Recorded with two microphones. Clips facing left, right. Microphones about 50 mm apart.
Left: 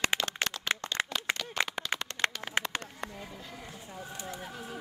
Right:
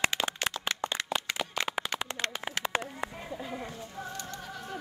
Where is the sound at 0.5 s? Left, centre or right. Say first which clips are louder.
Right 3 dB; centre.